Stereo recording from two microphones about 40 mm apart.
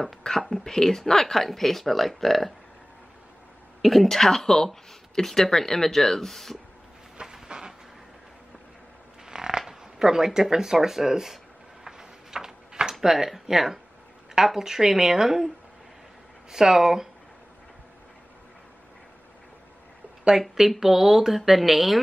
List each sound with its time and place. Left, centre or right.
0.4 s speech: centre
3.8 s speech: centre
7.4 s a sound: right
9.3 s speech: centre
11.8 s tick-tock: centre
13.0 s speech: centre
16.5 s speech: centre
20.3 s speech: centre